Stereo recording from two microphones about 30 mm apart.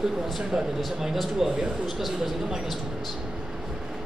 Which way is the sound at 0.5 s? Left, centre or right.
Right.